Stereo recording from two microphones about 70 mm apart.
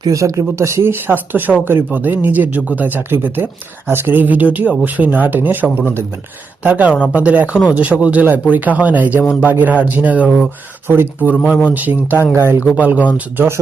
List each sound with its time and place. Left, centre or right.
0.0 s speech: right
0.8 s speech: right
10.8 s speech: right
12.3 s speech: right
12.6 s speech: right